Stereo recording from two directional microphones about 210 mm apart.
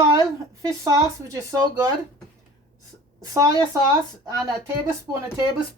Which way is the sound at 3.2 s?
15° right (ahead or behind).